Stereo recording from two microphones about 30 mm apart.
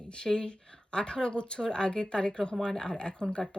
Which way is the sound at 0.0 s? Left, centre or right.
Left.